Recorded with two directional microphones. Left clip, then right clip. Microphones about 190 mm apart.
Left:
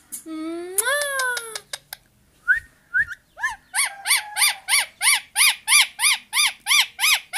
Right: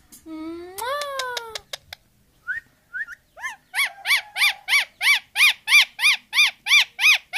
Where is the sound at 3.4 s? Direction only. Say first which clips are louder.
Even; 30° right (ahead or behind).